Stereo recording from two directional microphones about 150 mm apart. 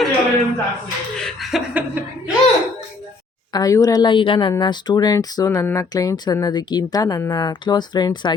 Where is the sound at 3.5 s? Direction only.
25° left (ahead or behind).